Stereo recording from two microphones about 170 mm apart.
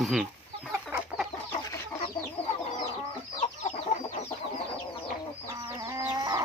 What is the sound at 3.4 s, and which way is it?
Chicken, 45° left (ahead or behind).